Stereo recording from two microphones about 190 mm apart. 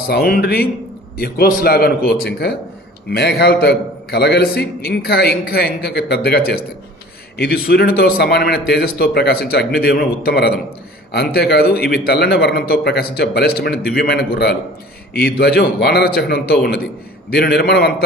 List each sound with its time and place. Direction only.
0.1 s a man's voice: 55° left (ahead or behind)